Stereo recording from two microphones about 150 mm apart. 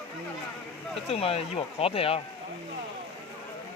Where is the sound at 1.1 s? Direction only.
40° left (ahead or behind).